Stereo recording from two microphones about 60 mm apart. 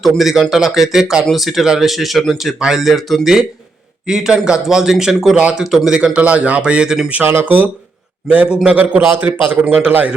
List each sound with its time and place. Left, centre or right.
0.0 s a man's voice: centre
6.1 s speech: right
7.3 s speech: right
8.4 s a man's voice: centre